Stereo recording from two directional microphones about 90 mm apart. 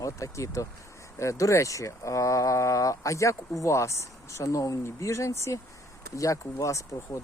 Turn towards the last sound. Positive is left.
turn(degrees=35)  # may be behind; listen again after turning